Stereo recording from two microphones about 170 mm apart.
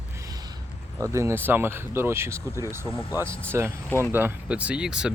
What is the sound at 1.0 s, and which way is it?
Speech, 15° right (ahead or behind).